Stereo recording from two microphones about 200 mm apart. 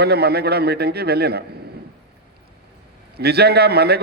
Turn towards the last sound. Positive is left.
turn(degrees=-55)  # may be behind; listen again after turning